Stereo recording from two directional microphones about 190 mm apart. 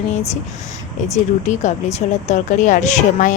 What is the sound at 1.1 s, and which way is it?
Speech, 40° left (ahead or behind).